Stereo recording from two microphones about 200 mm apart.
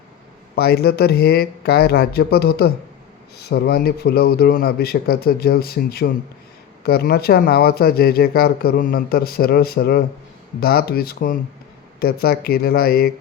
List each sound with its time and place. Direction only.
0.5 s speech: 50° left (ahead or behind)